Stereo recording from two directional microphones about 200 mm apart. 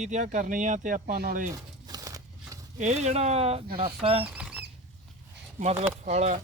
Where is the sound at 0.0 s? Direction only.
35° right (ahead or behind).